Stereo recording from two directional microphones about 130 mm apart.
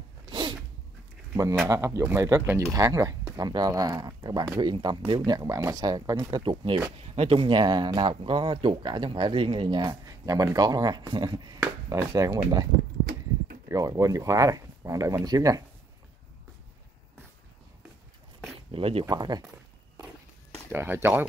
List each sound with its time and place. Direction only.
0.3 s sneeze: 35° right (ahead or behind)
1.3 s speech: 20° right (ahead or behind); by 5.2 s 45° right (ahead or behind)
5.2 s speech: 30° right (ahead or behind)
6.5 s speech: 45° right (ahead or behind); by 12.6 s 25° right (ahead or behind)
13.7 s speech: 25° right (ahead or behind)
18.7 s speech: 50° right (ahead or behind)
19.0 s speech: 30° right (ahead or behind)
20.7 s speech: 15° right (ahead or behind)